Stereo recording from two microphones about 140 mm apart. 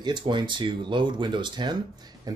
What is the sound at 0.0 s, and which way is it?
Speech, 30° right (ahead or behind).